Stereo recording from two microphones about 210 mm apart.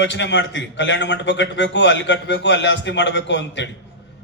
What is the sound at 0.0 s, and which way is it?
A man's voice, 55° left (ahead or behind).